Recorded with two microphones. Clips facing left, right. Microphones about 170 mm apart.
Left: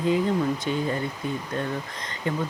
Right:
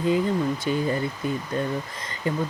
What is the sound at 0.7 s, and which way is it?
Speech, 5° right (ahead or behind).